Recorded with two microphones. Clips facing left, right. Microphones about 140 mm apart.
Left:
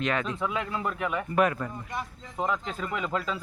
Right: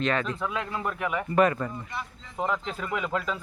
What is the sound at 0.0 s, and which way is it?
Speech, 10° left (ahead or behind).